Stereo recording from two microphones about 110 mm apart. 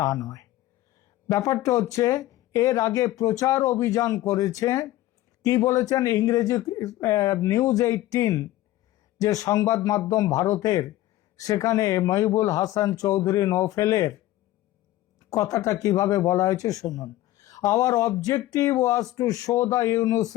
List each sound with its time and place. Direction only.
0.0 s speech: 30° left (ahead or behind)
15.3 s speech: 30° left (ahead or behind)